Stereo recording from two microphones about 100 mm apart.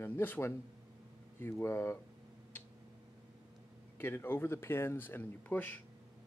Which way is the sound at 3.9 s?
20° left (ahead or behind).